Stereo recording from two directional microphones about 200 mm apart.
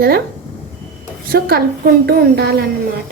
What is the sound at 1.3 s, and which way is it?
A woman's voice, 50° right (ahead or behind).